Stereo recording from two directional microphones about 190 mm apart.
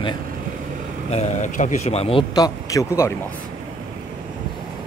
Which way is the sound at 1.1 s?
40° left (ahead or behind).